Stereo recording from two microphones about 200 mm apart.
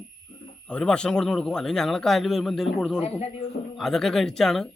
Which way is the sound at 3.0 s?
30° left (ahead or behind).